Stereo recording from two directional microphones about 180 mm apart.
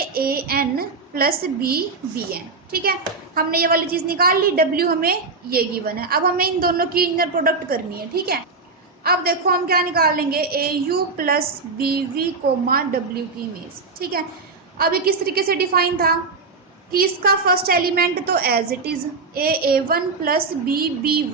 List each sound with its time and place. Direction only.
0.0 s a woman's voice: 55° right (ahead or behind)
14.8 s a woman's voice: 55° right (ahead or behind)